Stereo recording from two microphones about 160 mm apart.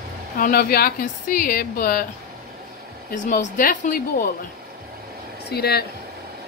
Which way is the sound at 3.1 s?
55° left (ahead or behind).